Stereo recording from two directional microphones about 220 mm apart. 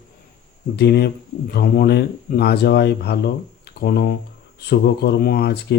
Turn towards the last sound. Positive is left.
turn(degrees=45)  # may be behind; listen again after turning